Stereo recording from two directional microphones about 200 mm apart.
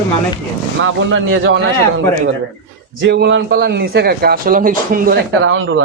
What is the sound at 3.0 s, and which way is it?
A man's voice, 60° right (ahead or behind).